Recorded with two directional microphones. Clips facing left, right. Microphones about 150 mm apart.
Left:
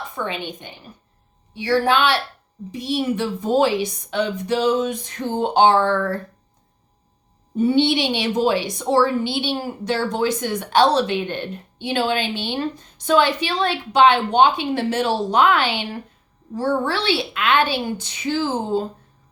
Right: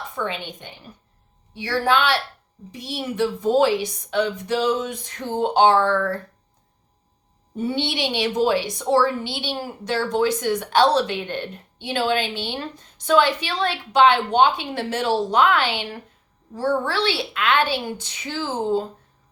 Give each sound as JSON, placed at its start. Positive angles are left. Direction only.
{"t": 0.3, "sound": "a woman's voice", "side_deg": 15}
{"t": 1.5, "sound": "a woman's voice", "side_deg": 20}
{"t": 7.7, "sound": "a woman's voice", "side_deg": 20}